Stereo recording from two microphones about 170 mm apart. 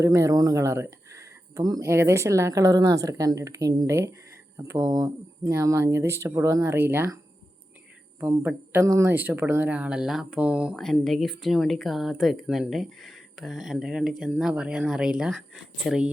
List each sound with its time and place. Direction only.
0.0 s speech: 20° right (ahead or behind)
8.2 s speech: 15° right (ahead or behind)